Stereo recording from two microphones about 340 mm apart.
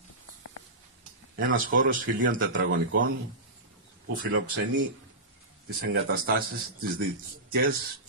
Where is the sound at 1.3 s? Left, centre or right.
Right.